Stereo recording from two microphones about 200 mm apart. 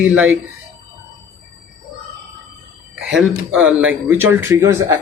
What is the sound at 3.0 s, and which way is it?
Speech, 5° right (ahead or behind).